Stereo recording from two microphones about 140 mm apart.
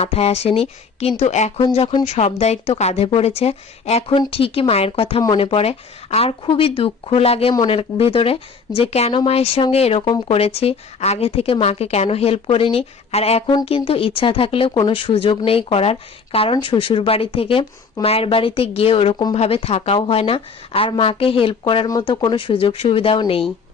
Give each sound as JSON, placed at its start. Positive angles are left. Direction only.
{"t": 0.0, "sound": "speech", "side_deg": 45}
{"t": 1.6, "sound": "speech", "side_deg": 40}
{"t": 2.0, "sound": "speech", "side_deg": 50}